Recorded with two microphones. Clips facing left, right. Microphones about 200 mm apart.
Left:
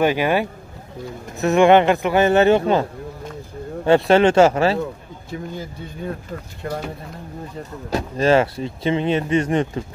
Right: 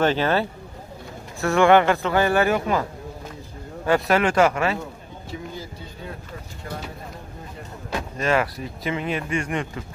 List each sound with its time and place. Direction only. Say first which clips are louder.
0.0 s speech: left 2 dB; 15° left (ahead or behind); by 4.7 s 30° left (ahead or behind)
5.3 s speech: left 5 dB; 55° left (ahead or behind)
7.9 s speech: left 6 dB; 30° left (ahead or behind)